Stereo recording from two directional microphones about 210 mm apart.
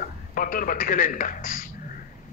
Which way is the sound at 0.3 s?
40° left (ahead or behind).